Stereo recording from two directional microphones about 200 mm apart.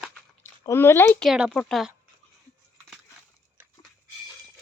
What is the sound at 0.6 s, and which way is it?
Speech, 15° left (ahead or behind).